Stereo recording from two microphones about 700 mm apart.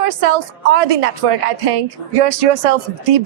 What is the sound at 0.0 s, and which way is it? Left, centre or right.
A woman's voice, right.